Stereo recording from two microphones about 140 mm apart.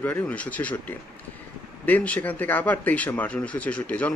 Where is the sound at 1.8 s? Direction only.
10° left (ahead or behind).